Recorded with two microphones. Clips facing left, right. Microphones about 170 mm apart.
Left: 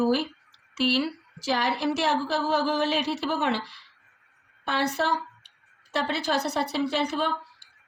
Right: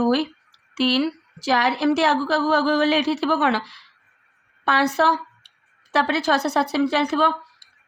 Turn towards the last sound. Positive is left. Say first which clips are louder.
# right 6 dB
turn(degrees=-90)